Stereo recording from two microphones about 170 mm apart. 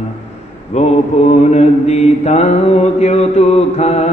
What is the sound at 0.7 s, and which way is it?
Mantra, 40° left (ahead or behind).